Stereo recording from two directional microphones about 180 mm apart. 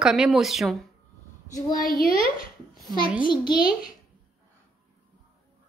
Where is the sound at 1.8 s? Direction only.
55° left (ahead or behind).